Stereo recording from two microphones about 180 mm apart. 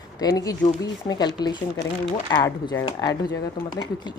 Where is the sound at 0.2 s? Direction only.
20° left (ahead or behind).